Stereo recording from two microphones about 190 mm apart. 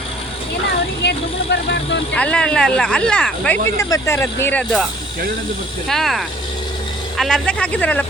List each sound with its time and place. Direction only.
1.0 s speech: 65° left (ahead or behind)
2.1 s speech: 5° left (ahead or behind)
3.8 s speech: 15° left (ahead or behind)
5.9 s speech: centre (ahead or behind)